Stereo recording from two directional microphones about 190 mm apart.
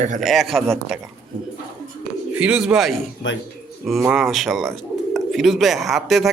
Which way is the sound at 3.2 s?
80° left.